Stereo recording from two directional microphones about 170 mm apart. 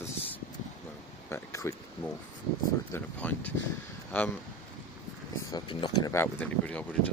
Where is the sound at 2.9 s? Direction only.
10° left (ahead or behind).